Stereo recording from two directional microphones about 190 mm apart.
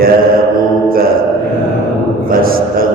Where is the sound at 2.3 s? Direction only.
50° right (ahead or behind).